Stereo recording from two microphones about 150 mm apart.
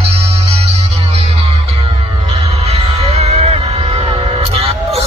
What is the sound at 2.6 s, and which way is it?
Music, 45° right (ahead or behind).